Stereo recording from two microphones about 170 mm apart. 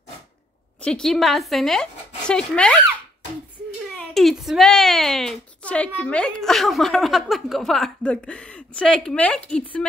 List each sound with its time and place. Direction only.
0.7 s a woman's voice: 5° left (ahead or behind)
3.9 s a woman's voice: centre (ahead or behind)